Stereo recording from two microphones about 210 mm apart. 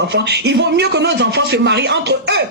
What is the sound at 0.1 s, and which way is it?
A man's voice, 50° right (ahead or behind).